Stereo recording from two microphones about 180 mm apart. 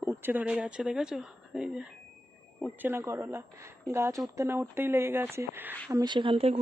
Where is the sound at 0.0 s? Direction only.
10° right (ahead or behind).